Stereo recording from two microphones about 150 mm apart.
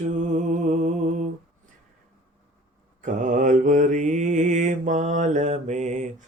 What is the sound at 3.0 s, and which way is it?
Mantra, 55° right (ahead or behind).